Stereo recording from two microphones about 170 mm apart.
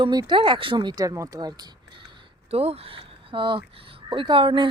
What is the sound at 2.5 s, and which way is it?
Speech, 35° right (ahead or behind).